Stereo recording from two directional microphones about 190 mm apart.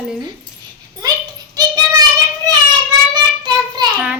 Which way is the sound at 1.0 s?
20° right (ahead or behind).